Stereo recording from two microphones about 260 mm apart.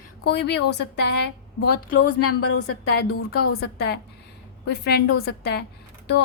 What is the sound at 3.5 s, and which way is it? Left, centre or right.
Speech, left.